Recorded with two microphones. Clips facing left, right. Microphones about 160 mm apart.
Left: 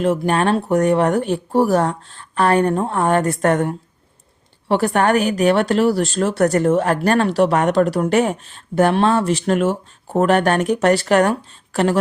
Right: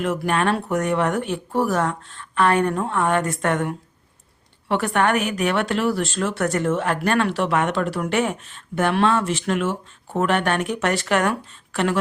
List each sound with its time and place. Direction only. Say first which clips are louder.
0.0 s a woman's voice: left 4 dB; 30° left (ahead or behind)